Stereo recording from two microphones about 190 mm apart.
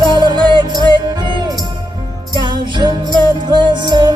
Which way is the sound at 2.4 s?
25° right (ahead or behind).